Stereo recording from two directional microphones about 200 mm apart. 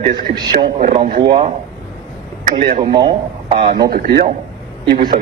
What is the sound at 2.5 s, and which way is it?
Speech, 40° right (ahead or behind).